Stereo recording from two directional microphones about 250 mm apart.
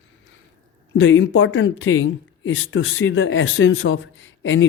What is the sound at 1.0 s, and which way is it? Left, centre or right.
Speech, left.